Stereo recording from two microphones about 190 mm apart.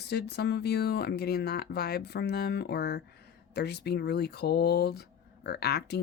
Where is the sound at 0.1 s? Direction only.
60° left (ahead or behind).